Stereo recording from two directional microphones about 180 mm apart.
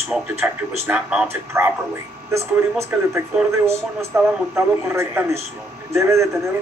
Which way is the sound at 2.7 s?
15° right (ahead or behind).